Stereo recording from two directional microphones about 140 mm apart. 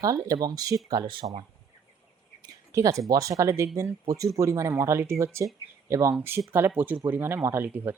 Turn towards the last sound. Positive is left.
turn(degrees=-15)  # may be behind; listen again after turning